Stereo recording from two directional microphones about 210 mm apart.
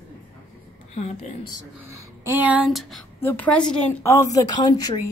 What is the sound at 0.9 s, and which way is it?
Speech, 30° left (ahead or behind).